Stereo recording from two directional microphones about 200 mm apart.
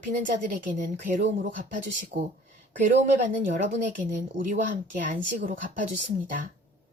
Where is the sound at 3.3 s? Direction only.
40° right (ahead or behind).